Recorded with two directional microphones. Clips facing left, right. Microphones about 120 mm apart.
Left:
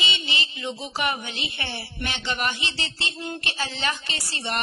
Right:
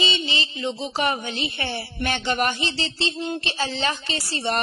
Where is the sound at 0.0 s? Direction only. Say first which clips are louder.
Right 4 dB; 35° right (ahead or behind).